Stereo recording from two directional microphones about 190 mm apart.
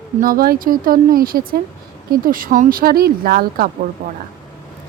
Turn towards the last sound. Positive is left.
turn(degrees=-55)  # may be behind; listen again after turning